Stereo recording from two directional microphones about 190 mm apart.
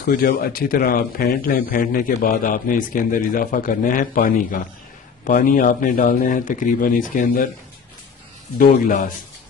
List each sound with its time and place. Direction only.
0.1 s a man's voice: 50° left (ahead or behind)
8.5 s a man's voice: 45° left (ahead or behind)